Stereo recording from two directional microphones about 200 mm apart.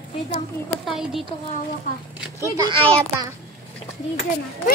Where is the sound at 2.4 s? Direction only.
20° right (ahead or behind).